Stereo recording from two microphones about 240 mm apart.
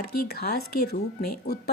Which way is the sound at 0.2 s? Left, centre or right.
Left.